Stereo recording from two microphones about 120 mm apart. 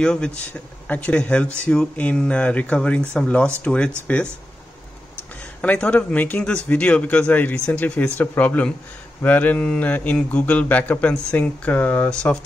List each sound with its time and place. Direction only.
0.0 s speech: 5° left (ahead or behind)
5.4 s speech: 10° left (ahead or behind)